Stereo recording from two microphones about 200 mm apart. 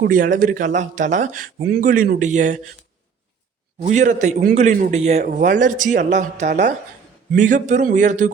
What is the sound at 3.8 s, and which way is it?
Speech, 40° right (ahead or behind).